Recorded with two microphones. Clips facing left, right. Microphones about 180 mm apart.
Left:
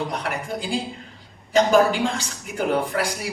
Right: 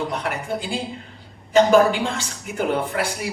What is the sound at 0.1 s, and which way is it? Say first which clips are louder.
A woman's voice: right 2 dB; 40° left (ahead or behind).